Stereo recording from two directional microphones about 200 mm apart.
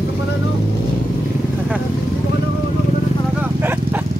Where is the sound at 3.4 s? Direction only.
10° right (ahead or behind).